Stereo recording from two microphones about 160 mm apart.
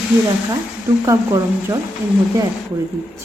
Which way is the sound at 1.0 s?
20° right (ahead or behind).